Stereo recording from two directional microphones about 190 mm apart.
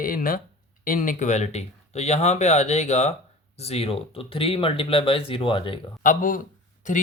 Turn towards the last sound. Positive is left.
turn(degrees=40)  # may be behind; listen again after turning